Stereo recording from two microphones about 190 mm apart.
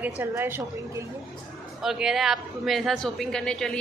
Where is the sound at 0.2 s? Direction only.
10° right (ahead or behind).